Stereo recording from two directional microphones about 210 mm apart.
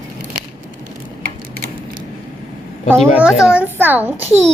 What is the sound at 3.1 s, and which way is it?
A child's voice, 5° right (ahead or behind).